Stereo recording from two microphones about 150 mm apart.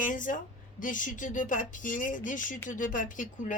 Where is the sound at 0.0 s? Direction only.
60° left (ahead or behind).